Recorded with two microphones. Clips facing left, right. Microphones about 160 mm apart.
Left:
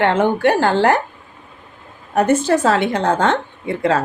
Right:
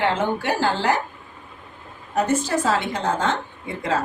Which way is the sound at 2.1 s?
65° left (ahead or behind).